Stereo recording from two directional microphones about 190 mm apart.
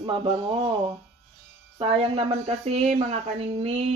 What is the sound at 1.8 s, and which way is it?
Speech, 30° right (ahead or behind).